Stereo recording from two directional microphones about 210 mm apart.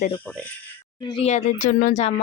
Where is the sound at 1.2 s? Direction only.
35° left (ahead or behind).